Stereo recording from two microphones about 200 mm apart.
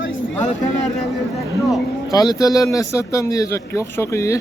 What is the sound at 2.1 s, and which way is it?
A man's voice, 20° left (ahead or behind).